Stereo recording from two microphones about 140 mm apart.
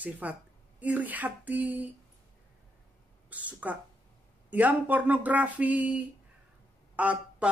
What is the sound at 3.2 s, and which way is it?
Speech, 10° right (ahead or behind).